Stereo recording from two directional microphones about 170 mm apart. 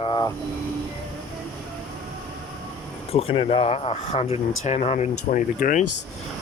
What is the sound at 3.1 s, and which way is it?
Speech, 30° left (ahead or behind).